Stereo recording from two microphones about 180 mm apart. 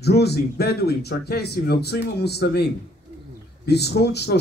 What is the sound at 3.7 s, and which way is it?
Speech, 65° left (ahead or behind).